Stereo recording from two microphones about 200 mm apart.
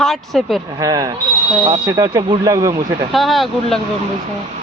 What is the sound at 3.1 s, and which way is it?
Speech, centre (ahead or behind).